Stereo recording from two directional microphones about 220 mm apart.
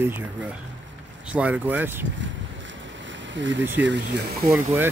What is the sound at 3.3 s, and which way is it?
Speech, 55° right (ahead or behind).